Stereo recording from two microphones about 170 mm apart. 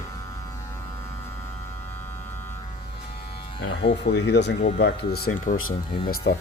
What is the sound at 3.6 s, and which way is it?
Music, 90° left.